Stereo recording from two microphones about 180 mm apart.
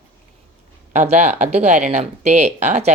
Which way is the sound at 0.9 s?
40° right (ahead or behind).